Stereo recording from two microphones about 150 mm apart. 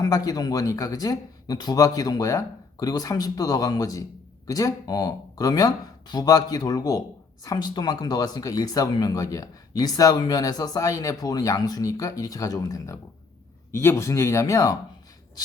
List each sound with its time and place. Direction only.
0.0 s speech: 25° left (ahead or behind)